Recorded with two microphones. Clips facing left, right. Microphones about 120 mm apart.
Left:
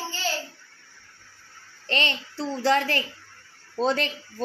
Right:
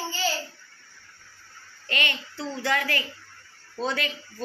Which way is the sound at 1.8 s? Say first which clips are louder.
Left 3 dB; 30° left (ahead or behind).